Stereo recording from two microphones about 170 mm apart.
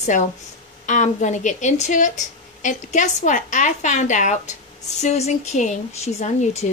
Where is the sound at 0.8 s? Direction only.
45° left (ahead or behind).